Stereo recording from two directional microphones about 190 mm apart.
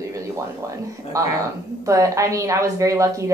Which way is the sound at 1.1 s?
15° right (ahead or behind).